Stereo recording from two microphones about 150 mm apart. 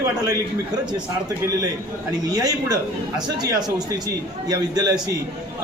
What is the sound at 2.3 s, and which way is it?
A man's voice, 25° right (ahead or behind).